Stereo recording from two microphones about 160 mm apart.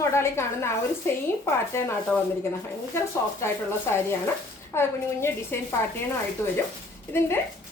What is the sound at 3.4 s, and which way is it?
Speech, 15° left (ahead or behind).